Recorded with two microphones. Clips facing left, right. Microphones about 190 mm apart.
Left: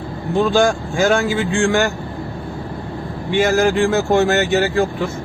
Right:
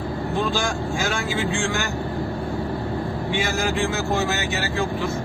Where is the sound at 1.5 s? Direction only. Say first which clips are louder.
Left 9 dB; 55° left (ahead or behind).